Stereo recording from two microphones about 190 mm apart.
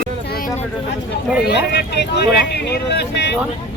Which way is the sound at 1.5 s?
60° left (ahead or behind).